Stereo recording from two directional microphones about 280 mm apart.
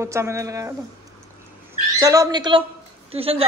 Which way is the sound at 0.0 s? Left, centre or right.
Centre.